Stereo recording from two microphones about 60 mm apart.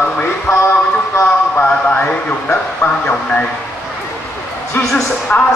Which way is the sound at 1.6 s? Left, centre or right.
Left.